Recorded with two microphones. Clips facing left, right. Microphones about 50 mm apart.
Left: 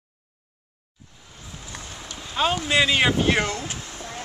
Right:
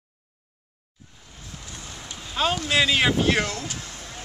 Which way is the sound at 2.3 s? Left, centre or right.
Centre.